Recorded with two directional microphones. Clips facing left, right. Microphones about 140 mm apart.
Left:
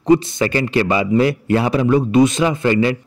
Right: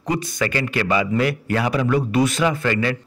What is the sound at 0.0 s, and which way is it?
A man's voice, 25° left (ahead or behind).